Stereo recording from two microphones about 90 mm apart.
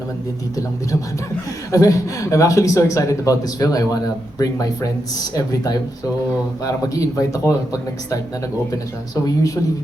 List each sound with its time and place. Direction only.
1.7 s speech: 35° left (ahead or behind)
6.8 s speech: 40° left (ahead or behind)